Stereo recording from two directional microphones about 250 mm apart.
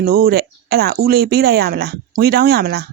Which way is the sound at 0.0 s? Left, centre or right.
Right.